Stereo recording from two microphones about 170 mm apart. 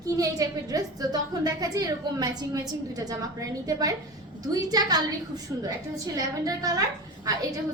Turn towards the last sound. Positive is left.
turn(degrees=-20)  # may be behind; listen again after turning